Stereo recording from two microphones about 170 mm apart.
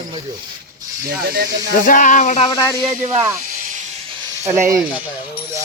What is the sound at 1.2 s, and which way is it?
Speech, 60° right (ahead or behind).